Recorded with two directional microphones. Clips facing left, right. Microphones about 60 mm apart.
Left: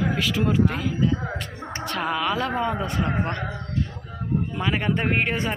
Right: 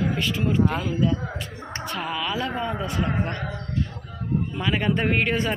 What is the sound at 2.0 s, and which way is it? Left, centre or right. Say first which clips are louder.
Speech: left 4 dB; left.